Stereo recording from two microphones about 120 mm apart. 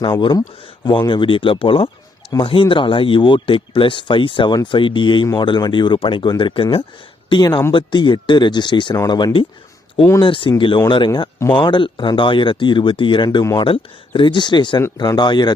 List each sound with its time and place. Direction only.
0.2 s speech: 35° left (ahead or behind)
7.3 s speech: 35° left (ahead or behind)